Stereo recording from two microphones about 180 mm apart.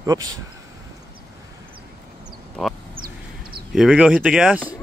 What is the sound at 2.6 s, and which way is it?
Quack, centre (ahead or behind).